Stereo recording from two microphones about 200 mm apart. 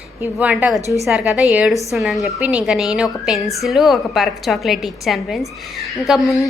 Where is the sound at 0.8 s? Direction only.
15° left (ahead or behind).